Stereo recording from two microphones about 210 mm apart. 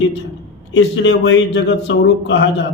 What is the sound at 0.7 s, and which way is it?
A man's voice, 60° left (ahead or behind).